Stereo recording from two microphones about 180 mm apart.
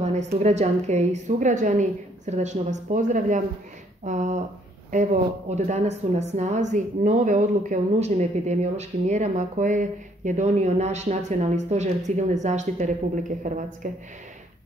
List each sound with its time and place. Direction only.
0.0 s a woman's voice: 40° right (ahead or behind)